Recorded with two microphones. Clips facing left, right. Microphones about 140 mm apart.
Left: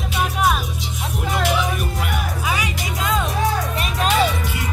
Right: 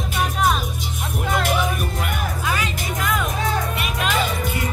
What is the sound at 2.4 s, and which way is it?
Music, 10° left (ahead or behind).